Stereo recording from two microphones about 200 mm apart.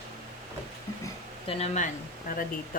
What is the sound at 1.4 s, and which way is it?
Speech, 35° left (ahead or behind).